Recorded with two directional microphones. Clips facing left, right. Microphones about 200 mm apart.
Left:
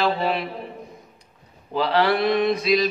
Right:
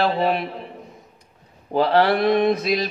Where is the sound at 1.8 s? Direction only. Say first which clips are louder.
Right 3 dB; 50° right (ahead or behind).